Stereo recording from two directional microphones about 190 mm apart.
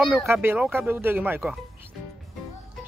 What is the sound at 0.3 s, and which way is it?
Speech, 10° right (ahead or behind).